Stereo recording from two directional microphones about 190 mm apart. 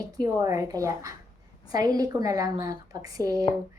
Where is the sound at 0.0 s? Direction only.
20° right (ahead or behind).